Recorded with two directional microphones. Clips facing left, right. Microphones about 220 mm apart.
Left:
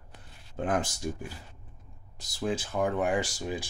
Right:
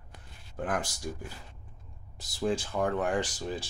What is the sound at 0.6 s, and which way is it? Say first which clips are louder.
Speech: left 3 dB; 25° left (ahead or behind).